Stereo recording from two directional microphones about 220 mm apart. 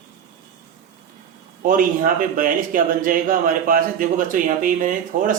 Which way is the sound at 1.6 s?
40° right (ahead or behind).